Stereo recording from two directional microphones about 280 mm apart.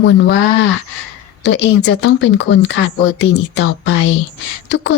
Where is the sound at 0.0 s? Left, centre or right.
Left.